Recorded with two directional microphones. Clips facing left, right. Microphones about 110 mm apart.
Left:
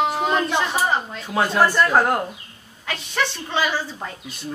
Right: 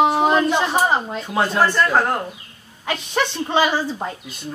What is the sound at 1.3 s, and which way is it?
Speech, centre (ahead or behind).